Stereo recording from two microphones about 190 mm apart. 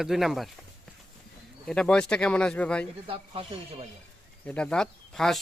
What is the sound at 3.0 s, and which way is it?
Speech, 30° right (ahead or behind).